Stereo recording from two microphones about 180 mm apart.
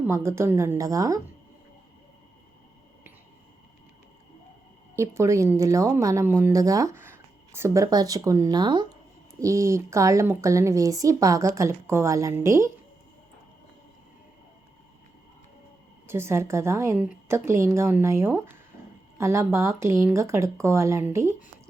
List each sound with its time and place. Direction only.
0.1 s speech: 15° right (ahead or behind)
4.9 s speech: 15° right (ahead or behind)
16.0 s speech: 15° right (ahead or behind)